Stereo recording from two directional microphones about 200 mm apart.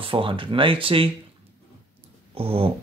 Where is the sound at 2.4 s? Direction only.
30° right (ahead or behind).